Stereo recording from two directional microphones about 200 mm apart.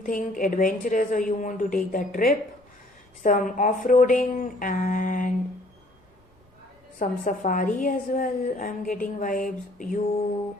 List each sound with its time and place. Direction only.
0.0 s a woman's voice: 45° left (ahead or behind)
7.0 s a woman's voice: 40° left (ahead or behind)